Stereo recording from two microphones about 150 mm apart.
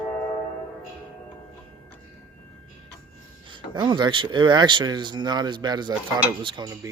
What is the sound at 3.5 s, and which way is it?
Speech, 30° right (ahead or behind).